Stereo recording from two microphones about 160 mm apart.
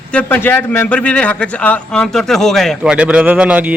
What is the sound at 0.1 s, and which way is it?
A man's voice, 10° left (ahead or behind).